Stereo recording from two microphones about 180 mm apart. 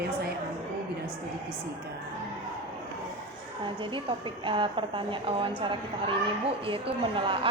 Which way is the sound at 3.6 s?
25° right (ahead or behind).